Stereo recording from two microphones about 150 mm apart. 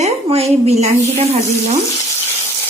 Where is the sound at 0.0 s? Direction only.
45° right (ahead or behind).